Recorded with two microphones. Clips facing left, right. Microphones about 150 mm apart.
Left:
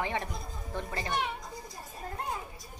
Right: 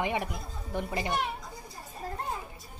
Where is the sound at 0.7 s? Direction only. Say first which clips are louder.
Right 4 dB; 15° right (ahead or behind).